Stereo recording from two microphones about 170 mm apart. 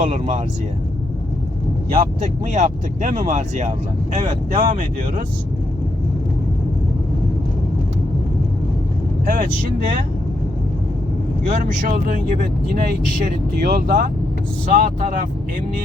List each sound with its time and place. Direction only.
0.0 s speech: 40° right (ahead or behind)
1.9 s speech: 50° right (ahead or behind)
11.4 s speech: 50° right (ahead or behind)
13.6 s speech: 55° right (ahead or behind)